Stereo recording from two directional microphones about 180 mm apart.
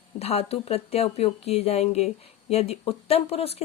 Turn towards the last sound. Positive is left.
turn(degrees=35)  # may be behind; listen again after turning